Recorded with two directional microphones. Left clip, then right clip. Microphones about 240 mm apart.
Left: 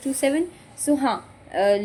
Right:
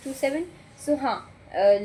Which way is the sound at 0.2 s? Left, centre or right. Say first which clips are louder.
Left 3 dB; left.